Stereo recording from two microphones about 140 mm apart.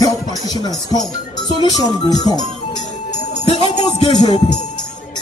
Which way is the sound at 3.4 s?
45° left (ahead or behind).